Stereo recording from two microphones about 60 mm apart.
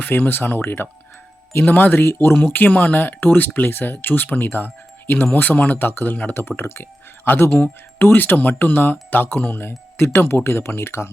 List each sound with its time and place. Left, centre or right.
0.0 s speech: left
6.6 s speech: left